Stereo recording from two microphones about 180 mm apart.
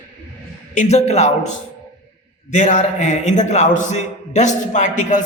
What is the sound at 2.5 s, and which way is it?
A man's voice, 40° left (ahead or behind).